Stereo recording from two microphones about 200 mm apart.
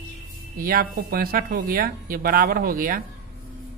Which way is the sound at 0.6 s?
45° right (ahead or behind).